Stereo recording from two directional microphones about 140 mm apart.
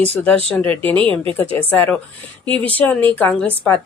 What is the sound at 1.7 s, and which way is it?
Speech, 15° left (ahead or behind).